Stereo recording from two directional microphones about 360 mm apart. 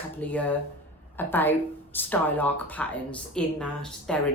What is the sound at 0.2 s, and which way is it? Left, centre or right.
Speech, centre.